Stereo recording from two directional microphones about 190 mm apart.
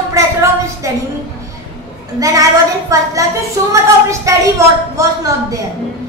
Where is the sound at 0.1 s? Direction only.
15° right (ahead or behind).